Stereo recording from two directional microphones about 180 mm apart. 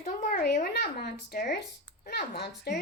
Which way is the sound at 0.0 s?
45° left (ahead or behind).